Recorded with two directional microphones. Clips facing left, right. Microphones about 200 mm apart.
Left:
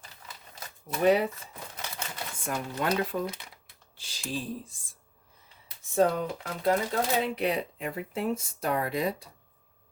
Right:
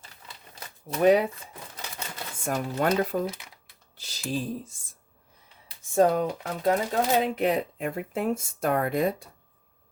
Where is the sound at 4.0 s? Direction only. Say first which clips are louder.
Right 4 dB; 40° right (ahead or behind).